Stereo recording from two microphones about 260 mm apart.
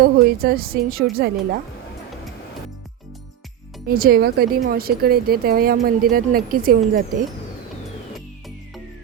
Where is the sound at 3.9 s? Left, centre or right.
Right.